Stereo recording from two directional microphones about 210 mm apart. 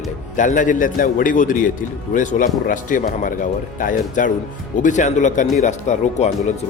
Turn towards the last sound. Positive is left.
turn(degrees=35)  # may be behind; listen again after turning